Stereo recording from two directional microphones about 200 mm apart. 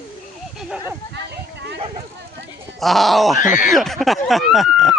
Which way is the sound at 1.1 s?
60° right (ahead or behind).